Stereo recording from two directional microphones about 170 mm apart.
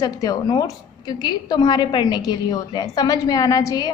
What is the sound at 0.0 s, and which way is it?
A woman's voice, 20° left (ahead or behind).